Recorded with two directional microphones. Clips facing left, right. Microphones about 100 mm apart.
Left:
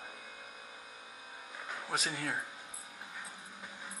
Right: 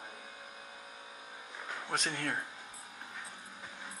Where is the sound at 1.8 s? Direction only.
5° left (ahead or behind).